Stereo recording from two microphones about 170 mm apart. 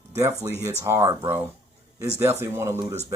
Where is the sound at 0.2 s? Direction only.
20° right (ahead or behind).